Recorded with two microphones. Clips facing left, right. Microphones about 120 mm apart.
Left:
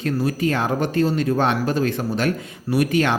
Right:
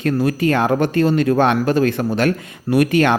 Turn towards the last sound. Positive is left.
turn(degrees=-60)  # may be behind; listen again after turning